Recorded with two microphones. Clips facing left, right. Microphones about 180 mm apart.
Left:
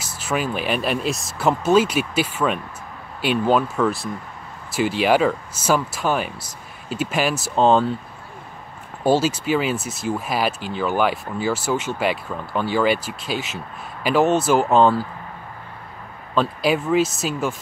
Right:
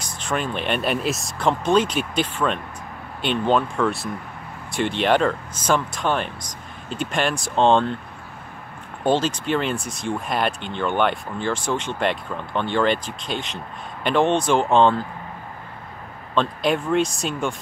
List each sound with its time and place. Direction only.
0.0 s speech: 5° left (ahead or behind)
9.0 s speech: 5° left (ahead or behind)
16.3 s speech: 5° left (ahead or behind)